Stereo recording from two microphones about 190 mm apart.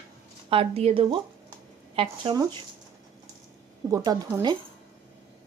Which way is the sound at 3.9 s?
20° right (ahead or behind).